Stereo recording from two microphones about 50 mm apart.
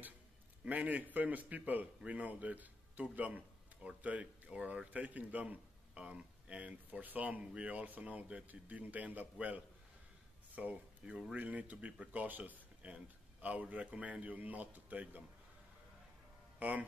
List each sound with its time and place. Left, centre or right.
0.7 s a man's voice: right
10.5 s a man's voice: right
16.5 s speech: right